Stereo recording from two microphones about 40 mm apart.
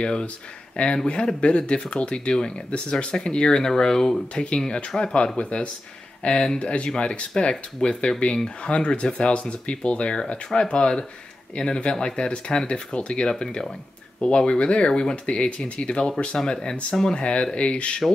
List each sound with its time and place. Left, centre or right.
0.0 s speech: left
4.6 s speech: left